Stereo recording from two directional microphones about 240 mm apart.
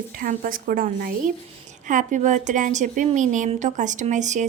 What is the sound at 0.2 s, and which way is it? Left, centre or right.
A woman's voice, right.